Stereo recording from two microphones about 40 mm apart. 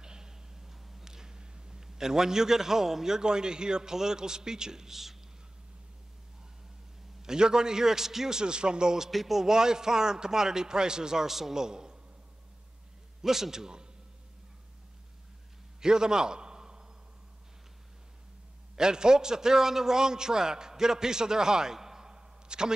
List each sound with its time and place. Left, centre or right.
0.0 s speech: centre
7.2 s a man's voice: centre
9.1 s a man's voice: centre
13.2 s a man's voice: centre
15.8 s a sound: centre
18.8 s a man's voice: centre